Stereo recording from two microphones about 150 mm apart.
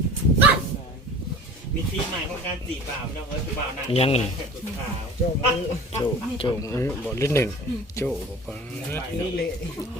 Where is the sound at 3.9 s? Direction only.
40° left (ahead or behind).